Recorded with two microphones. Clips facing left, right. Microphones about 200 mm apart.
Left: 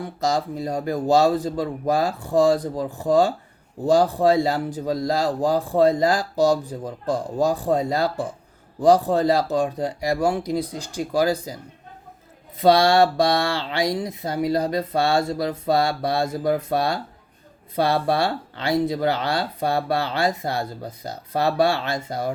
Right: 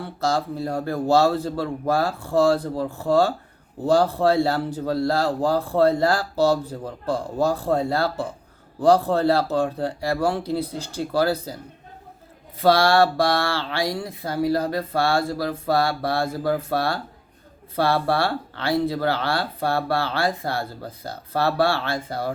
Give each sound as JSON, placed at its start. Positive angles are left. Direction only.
{"t": 0.0, "sound": "speech", "side_deg": 15}
{"t": 12.5, "sound": "speech", "side_deg": 20}